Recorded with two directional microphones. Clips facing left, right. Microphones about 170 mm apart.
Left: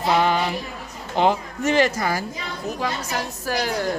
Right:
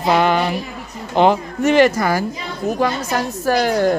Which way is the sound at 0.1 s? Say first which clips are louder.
Right 4 dB; 70° right (ahead or behind).